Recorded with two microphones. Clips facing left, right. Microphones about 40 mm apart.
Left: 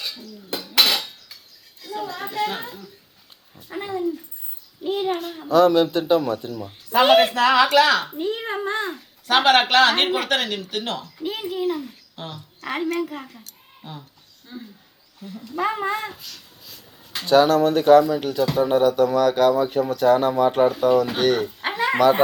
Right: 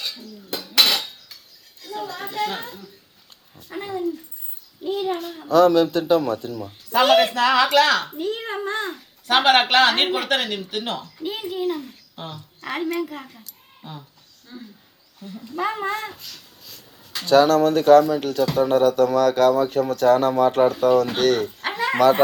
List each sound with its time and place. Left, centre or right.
0.0 s dishes: centre
1.8 s a sound: centre
3.5 s speech: centre
4.8 s a child's voice: centre
5.2 s a man's voice: centre
14.4 s speech: centre